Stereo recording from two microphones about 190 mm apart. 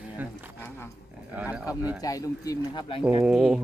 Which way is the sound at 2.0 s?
20° left (ahead or behind).